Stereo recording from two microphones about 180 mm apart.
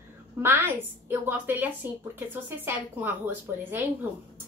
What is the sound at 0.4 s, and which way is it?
Speech, 10° right (ahead or behind).